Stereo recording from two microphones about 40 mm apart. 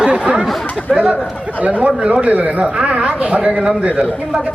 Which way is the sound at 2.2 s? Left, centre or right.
Right.